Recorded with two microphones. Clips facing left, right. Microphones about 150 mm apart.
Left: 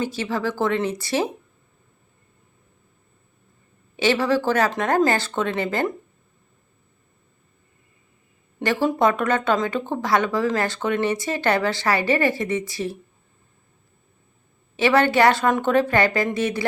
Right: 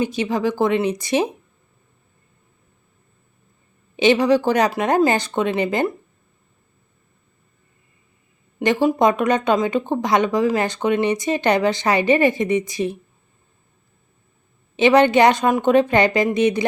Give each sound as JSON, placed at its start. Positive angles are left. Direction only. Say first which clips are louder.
{"t": 0.0, "sound": "speech", "louder": "right 4 dB", "side_deg": -15}
{"t": 3.9, "sound": "speech", "louder": "right 5 dB", "side_deg": -20}
{"t": 8.5, "sound": "speech", "louder": "right 4 dB", "side_deg": -15}
{"t": 14.8, "sound": "a woman's voice", "louder": "right 4 dB", "side_deg": -20}